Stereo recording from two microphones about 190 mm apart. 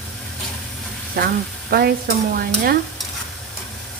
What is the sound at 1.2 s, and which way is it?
Speech, 55° right (ahead or behind).